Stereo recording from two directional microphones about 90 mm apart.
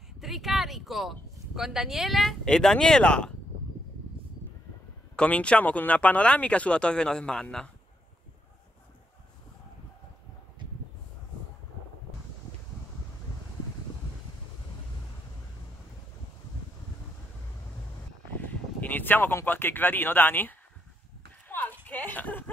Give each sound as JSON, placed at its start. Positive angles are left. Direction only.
{"t": 0.2, "sound": "speech", "side_deg": 0}
{"t": 5.1, "sound": "speech", "side_deg": 15}
{"t": 18.3, "sound": "speech", "side_deg": 20}
{"t": 21.5, "sound": "clip-clop", "side_deg": 20}
{"t": 21.8, "sound": "speech", "side_deg": 20}